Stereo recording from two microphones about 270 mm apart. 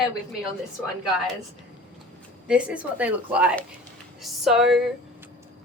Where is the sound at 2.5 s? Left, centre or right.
Centre.